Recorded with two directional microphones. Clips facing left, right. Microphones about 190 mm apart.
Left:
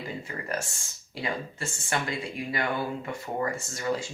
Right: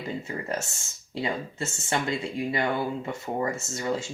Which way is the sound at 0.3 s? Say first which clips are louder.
Right 2 dB; 25° right (ahead or behind).